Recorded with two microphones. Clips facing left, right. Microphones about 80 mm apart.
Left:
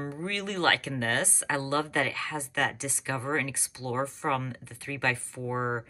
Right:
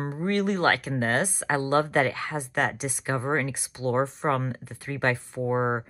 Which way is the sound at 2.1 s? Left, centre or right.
Right.